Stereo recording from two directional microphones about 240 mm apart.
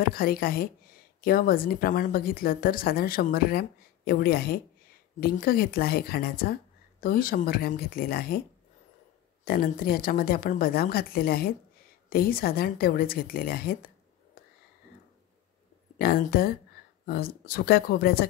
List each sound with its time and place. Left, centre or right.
0.0 s a woman's voice: left
9.4 s a woman's voice: left
16.0 s a woman's voice: left